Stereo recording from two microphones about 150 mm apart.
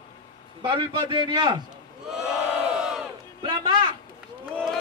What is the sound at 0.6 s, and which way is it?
A man's voice, 35° right (ahead or behind).